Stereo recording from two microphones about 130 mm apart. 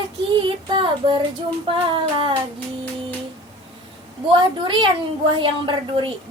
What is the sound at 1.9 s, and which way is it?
Speech, 40° right (ahead or behind).